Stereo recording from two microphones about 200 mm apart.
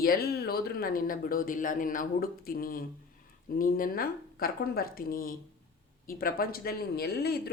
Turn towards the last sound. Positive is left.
turn(degrees=50)  # may be behind; listen again after turning